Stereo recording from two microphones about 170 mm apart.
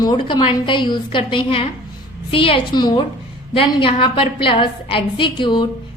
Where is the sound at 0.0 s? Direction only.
25° left (ahead or behind).